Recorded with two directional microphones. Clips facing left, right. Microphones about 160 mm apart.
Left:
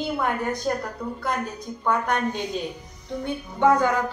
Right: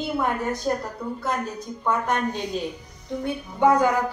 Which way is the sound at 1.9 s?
Centre (ahead or behind).